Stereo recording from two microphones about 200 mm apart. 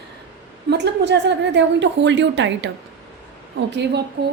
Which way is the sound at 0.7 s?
60° right (ahead or behind).